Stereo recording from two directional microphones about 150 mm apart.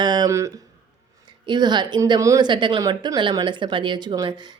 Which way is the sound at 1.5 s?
30° right (ahead or behind).